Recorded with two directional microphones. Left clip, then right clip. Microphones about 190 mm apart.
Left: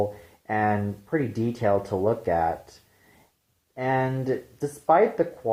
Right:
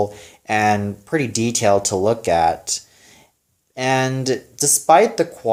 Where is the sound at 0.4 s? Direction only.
30° right (ahead or behind).